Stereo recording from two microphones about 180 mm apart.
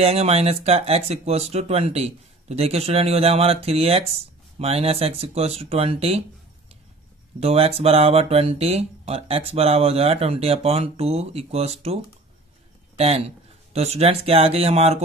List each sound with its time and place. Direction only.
0.0 s speech: 35° right (ahead or behind)
7.3 s speech: 35° right (ahead or behind)